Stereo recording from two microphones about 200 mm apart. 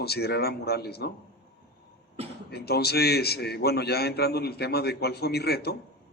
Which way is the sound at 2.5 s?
55° left (ahead or behind).